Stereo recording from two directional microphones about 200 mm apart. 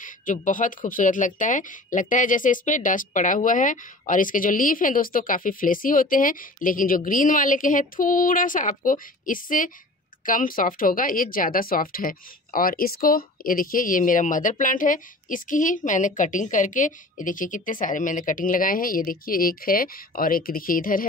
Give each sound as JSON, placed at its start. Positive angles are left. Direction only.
{"t": 0.0, "sound": "speech", "side_deg": 40}